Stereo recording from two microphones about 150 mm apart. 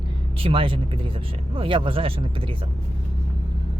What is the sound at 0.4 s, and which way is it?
Speech, 35° right (ahead or behind).